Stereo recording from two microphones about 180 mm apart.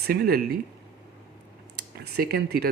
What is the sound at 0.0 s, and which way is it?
Speech, 60° right (ahead or behind).